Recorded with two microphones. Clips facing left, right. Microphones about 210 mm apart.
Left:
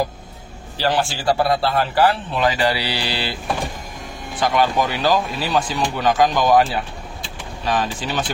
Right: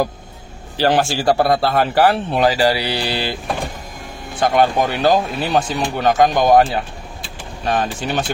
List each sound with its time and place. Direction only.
0.7 s a man's voice: 55° right (ahead or behind)
2.4 s a man's voice: 35° right (ahead or behind)
4.4 s a man's voice: 50° right (ahead or behind)